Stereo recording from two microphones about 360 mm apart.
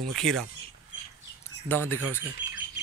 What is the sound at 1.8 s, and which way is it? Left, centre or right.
Speech, right.